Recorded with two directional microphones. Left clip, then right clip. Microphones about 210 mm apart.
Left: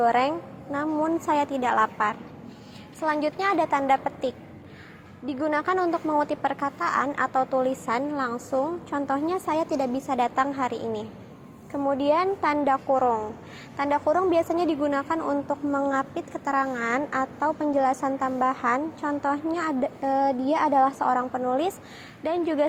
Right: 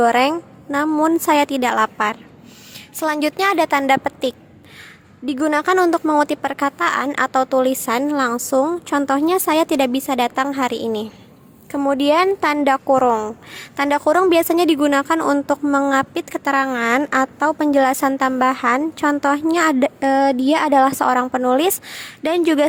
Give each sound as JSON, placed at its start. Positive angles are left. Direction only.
{"t": 0.0, "sound": "a woman's voice", "side_deg": -50}